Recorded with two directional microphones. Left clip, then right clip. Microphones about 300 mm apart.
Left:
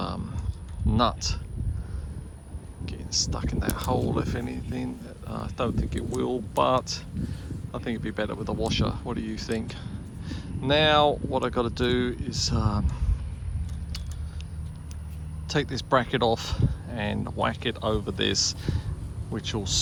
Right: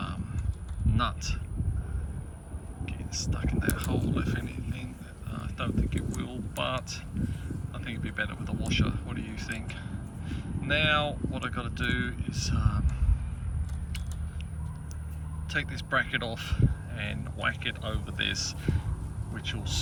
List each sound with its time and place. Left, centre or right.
0.9 s speech: centre
2.8 s speech: centre
15.4 s speech: centre